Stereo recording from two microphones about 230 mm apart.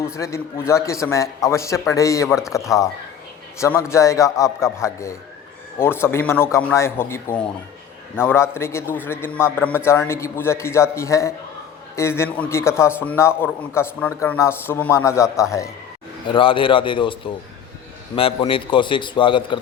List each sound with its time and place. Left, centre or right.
0.0 s a man's voice: centre